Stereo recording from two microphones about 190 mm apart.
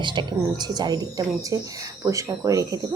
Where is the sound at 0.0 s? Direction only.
25° right (ahead or behind).